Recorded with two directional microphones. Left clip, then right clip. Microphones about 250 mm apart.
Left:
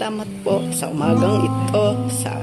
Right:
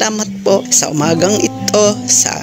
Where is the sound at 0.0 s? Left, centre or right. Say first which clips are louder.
Right 9 dB; right.